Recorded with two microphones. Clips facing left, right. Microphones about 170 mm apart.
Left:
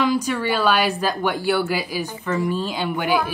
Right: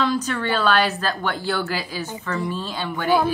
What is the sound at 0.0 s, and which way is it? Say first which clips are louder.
A woman's voice: left 2 dB; 10° left (ahead or behind).